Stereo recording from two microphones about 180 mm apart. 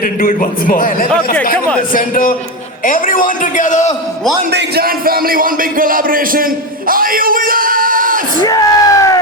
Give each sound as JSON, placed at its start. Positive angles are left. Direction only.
{"t": 0.0, "sound": "a man's voice", "side_deg": 50}
{"t": 4.5, "sound": "speech", "side_deg": -60}
{"t": 8.4, "sound": "a sound", "side_deg": 20}